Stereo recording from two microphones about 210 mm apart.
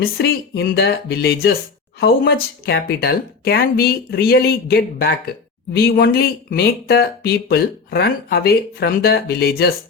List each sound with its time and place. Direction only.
0.0 s speech: 50° left (ahead or behind)